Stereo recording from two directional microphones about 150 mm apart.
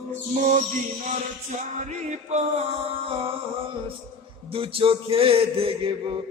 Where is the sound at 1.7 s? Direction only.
50° right (ahead or behind).